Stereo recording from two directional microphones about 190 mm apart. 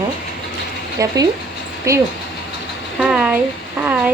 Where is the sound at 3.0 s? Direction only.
5° right (ahead or behind).